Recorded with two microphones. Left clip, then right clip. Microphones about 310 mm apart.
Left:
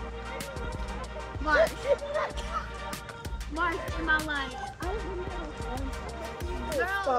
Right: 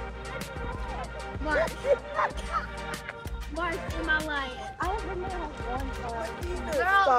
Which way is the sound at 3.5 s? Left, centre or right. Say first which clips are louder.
Left 1 dB; centre.